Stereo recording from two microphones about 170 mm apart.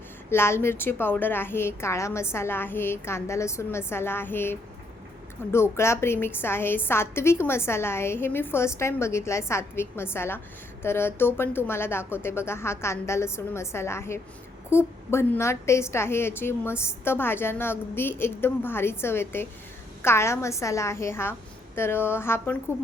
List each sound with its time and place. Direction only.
0.3 s a woman's voice: 15° left (ahead or behind)